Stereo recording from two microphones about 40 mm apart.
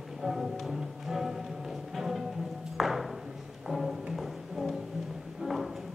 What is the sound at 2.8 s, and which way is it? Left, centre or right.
Ping, centre.